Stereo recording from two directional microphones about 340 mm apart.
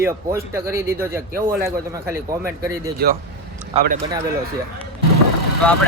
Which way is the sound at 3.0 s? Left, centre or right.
Right.